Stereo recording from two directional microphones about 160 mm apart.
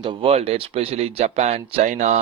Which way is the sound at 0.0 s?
30° right (ahead or behind).